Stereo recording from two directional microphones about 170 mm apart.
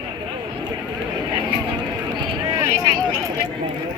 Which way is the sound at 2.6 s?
20° right (ahead or behind).